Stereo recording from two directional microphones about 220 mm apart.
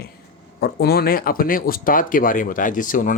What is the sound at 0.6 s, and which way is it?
Speech, 45° left (ahead or behind).